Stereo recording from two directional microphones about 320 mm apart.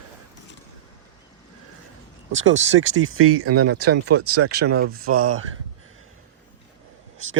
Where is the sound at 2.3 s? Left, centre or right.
Right.